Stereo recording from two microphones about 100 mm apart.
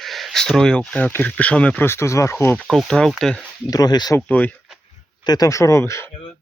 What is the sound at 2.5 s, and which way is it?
Speech, 10° left (ahead or behind).